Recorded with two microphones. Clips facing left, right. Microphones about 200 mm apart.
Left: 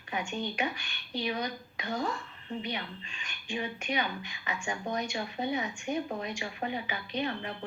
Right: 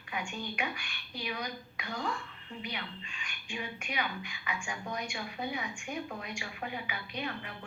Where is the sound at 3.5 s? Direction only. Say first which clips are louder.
Left 6 dB; 30° left (ahead or behind).